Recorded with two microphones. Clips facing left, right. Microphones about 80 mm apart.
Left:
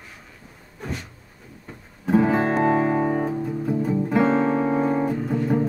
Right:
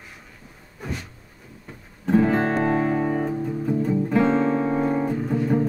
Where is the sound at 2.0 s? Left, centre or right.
Centre.